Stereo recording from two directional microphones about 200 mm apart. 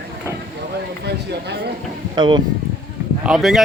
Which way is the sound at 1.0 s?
55° right (ahead or behind).